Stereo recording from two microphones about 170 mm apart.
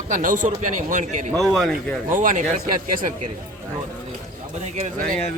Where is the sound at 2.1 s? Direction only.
50° right (ahead or behind).